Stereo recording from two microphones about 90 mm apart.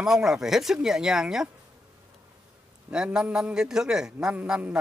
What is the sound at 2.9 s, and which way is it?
A man's voice, 10° right (ahead or behind).